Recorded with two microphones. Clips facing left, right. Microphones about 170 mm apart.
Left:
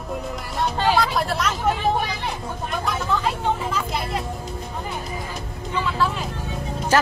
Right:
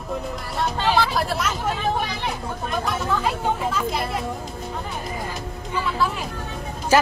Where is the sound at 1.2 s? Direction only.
Centre (ahead or behind).